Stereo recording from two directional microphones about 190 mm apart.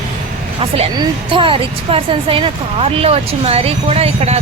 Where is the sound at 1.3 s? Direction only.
30° right (ahead or behind).